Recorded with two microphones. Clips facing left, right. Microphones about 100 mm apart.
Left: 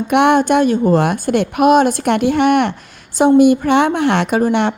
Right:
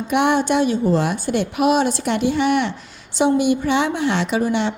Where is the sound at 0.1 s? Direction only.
60° left (ahead or behind).